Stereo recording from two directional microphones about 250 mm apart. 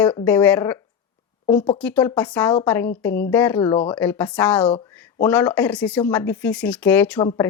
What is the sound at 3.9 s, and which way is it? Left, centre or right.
Speech, centre.